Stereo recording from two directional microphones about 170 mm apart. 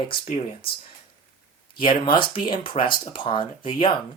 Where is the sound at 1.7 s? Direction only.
30° left (ahead or behind).